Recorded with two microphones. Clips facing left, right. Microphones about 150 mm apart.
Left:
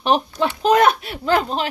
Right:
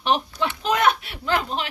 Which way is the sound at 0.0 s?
40° left (ahead or behind).